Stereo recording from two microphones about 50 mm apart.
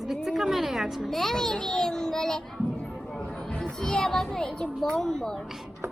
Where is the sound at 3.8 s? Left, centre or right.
Centre.